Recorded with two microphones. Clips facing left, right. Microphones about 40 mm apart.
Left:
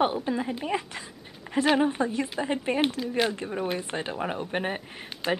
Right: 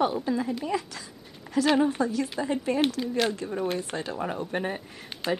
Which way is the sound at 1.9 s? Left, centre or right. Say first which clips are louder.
Right 1 dB; left.